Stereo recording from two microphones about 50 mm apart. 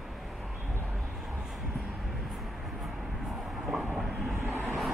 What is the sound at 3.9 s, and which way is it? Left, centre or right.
Vehicle, centre.